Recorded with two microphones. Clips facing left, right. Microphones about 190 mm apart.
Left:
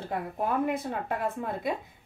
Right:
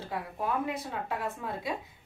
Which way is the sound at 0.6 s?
55° left (ahead or behind).